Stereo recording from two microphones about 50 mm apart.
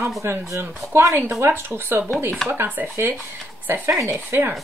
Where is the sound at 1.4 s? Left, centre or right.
Right.